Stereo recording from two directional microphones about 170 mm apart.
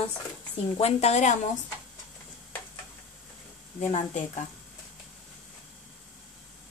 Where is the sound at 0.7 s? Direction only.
40° left (ahead or behind).